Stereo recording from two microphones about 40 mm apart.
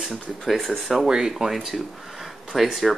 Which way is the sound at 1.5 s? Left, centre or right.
Centre.